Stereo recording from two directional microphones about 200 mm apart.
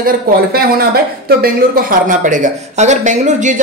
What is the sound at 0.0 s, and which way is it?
Speech, 50° right (ahead or behind).